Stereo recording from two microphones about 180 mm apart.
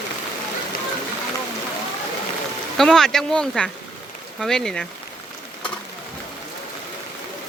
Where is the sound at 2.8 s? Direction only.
Centre (ahead or behind).